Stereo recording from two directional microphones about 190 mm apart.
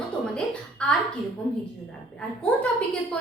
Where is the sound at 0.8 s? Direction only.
5° left (ahead or behind).